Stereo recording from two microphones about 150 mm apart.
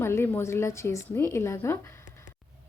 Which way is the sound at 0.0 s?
15° left (ahead or behind).